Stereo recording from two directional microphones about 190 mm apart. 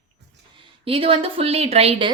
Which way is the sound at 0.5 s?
30° right (ahead or behind).